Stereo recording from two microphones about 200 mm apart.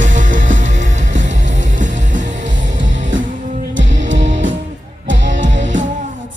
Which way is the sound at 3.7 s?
70° right (ahead or behind).